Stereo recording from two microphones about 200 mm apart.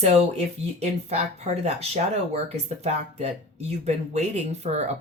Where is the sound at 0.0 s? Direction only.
30° right (ahead or behind).